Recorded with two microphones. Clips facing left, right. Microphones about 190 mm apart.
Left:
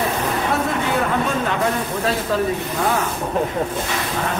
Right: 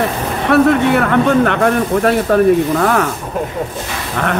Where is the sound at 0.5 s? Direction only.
70° right (ahead or behind).